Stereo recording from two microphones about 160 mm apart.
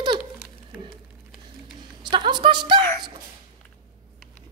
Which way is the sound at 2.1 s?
30° right (ahead or behind).